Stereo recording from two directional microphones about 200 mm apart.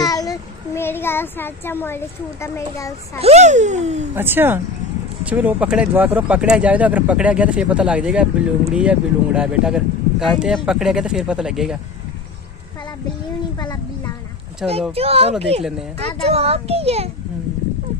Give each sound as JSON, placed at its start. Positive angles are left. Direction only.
{"t": 0.0, "sound": "a child's voice", "side_deg": 20}
{"t": 3.2, "sound": "a child's voice", "side_deg": -35}
{"t": 4.1, "sound": "speech", "side_deg": -10}
{"t": 13.6, "sound": "a sound", "side_deg": 20}
{"t": 14.7, "sound": "a child's voice", "side_deg": -30}